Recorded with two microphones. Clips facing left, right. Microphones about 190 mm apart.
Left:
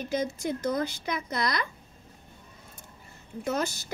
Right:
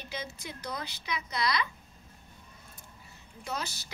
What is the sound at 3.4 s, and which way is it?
Speech, 50° left (ahead or behind).